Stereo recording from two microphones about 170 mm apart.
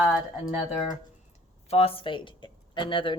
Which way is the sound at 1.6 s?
35° left (ahead or behind).